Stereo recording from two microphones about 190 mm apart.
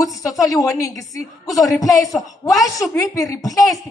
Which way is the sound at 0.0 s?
15° left (ahead or behind).